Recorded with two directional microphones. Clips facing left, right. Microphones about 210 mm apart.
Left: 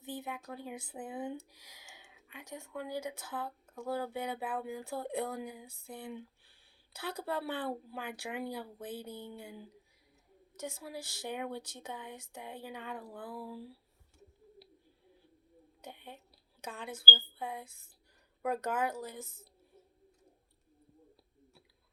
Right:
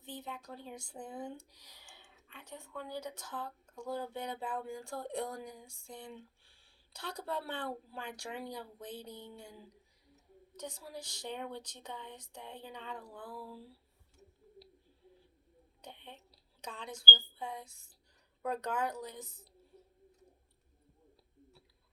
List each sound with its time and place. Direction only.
0.0 s a woman's voice: 10° left (ahead or behind)
10.8 s speech: 5° left (ahead or behind)
15.8 s a woman's voice: 10° left (ahead or behind)
17.6 s speech: 55° left (ahead or behind)
18.4 s speech: 5° left (ahead or behind)